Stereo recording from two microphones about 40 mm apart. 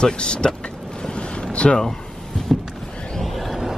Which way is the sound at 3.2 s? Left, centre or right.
Centre.